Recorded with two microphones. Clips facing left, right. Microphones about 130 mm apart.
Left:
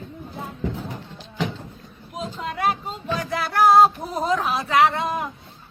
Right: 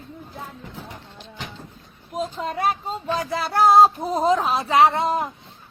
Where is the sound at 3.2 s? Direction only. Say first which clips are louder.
Even; 30° right (ahead or behind).